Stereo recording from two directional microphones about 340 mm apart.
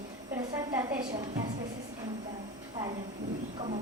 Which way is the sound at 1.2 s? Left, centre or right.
Centre.